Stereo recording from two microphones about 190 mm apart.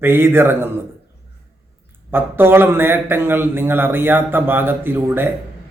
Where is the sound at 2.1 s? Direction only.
10° right (ahead or behind).